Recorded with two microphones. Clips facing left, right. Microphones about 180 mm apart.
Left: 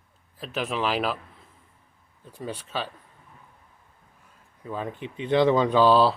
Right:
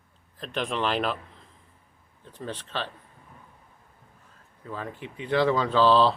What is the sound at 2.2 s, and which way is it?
Speech, 10° left (ahead or behind).